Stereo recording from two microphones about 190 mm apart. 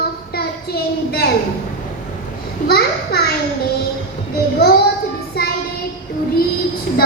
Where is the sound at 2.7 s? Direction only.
55° left (ahead or behind).